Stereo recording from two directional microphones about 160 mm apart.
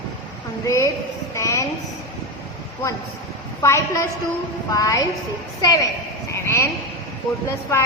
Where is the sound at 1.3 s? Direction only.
20° left (ahead or behind).